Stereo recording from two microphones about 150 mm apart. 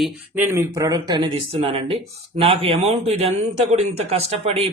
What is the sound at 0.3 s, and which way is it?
A man's voice, 15° right (ahead or behind).